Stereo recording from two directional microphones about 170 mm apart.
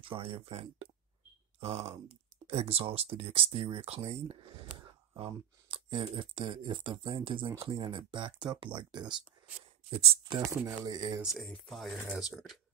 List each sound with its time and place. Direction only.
0.0 s speech: 30° right (ahead or behind)
10.5 s speech: 20° right (ahead or behind)
11.1 s speech: centre (ahead or behind)